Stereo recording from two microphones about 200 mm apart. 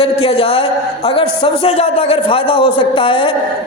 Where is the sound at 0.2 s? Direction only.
25° left (ahead or behind).